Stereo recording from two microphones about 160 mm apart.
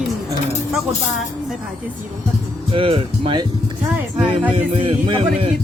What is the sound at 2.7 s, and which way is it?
Speech, 35° right (ahead or behind).